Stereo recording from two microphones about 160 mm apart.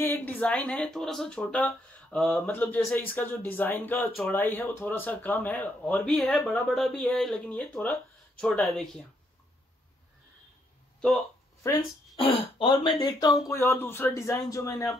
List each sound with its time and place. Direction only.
0.0 s speech: 15° left (ahead or behind)
12.2 s speech: 35° left (ahead or behind)
13.4 s speech: 15° left (ahead or behind)